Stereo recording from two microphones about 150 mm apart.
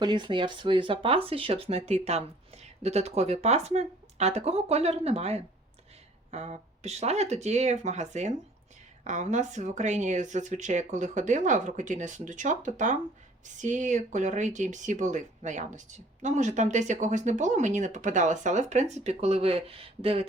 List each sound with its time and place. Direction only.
0.0 s speech: 30° right (ahead or behind)